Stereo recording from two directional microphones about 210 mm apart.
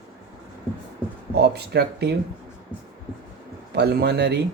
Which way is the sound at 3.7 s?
50° right (ahead or behind).